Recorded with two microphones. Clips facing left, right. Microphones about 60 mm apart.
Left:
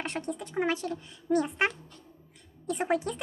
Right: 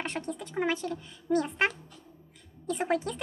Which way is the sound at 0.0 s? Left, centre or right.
Centre.